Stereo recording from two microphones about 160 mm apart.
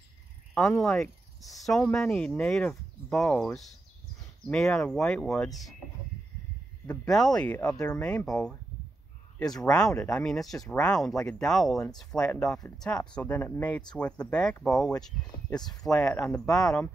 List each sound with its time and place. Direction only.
0.6 s speech: 5° left (ahead or behind)
6.9 s speech: 5° left (ahead or behind)
9.7 s speech: 5° left (ahead or behind)
15.5 s speech: 25° left (ahead or behind)
15.8 s speech: 5° left (ahead or behind)